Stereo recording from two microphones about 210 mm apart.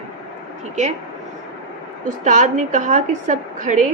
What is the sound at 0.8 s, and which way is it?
Speech, 35° right (ahead or behind).